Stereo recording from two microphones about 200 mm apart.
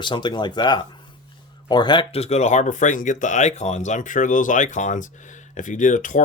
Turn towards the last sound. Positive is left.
turn(degrees=40)  # may be behind; listen again after turning